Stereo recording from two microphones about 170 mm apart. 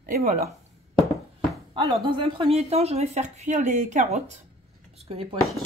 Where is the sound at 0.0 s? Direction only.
60° right (ahead or behind).